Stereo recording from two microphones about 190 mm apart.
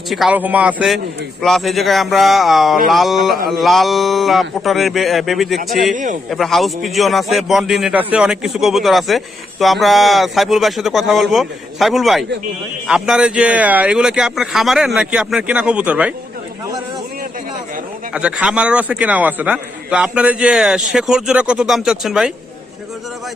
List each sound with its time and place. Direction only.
0.1 s a man's voice: 5° right (ahead or behind)
5.9 s a man's voice: 40° right (ahead or behind)
6.3 s a man's voice: centre (ahead or behind)
18.1 s a man's voice: 5° right (ahead or behind)